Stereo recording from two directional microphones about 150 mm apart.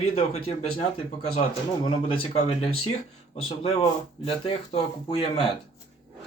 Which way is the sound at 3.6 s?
40° left (ahead or behind).